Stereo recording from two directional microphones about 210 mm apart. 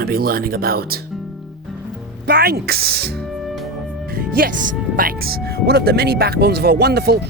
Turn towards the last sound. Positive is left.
turn(degrees=-50)  # may be behind; listen again after turning